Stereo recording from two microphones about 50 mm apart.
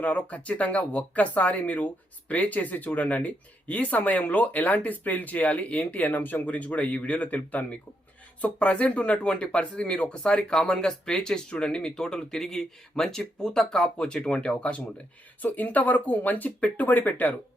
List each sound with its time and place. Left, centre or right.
0.0 s speech: left